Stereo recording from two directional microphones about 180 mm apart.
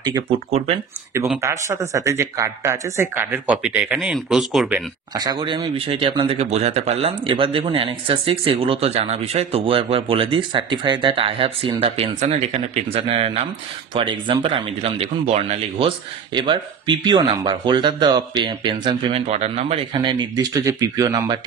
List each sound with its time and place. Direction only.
0.5 s speech: 35° right (ahead or behind)
1.4 s speech: 15° right (ahead or behind); by 4.7 s centre (ahead or behind)
5.1 s speech: 20° right (ahead or behind)
20.0 s speech: 25° right (ahead or behind)